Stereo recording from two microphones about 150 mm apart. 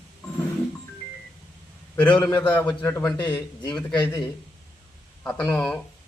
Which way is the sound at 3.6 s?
25° left (ahead or behind).